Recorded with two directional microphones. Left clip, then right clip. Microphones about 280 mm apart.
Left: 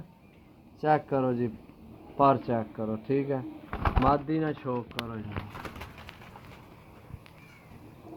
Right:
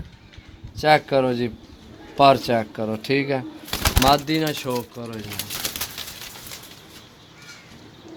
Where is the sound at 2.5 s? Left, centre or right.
Right.